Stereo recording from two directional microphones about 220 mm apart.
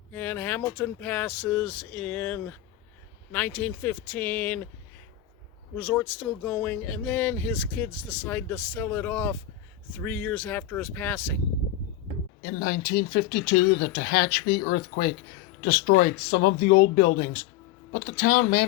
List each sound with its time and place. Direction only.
0.1 s speech: 10° left (ahead or behind)
5.7 s speech: 5° left (ahead or behind)
12.4 s speech: 45° left (ahead or behind)